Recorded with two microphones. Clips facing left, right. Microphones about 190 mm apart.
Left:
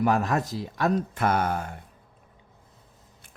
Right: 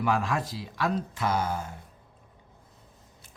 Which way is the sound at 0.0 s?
45° left (ahead or behind).